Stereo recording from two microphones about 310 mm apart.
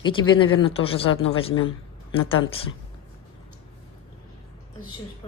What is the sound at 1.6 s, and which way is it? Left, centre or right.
Speech, centre.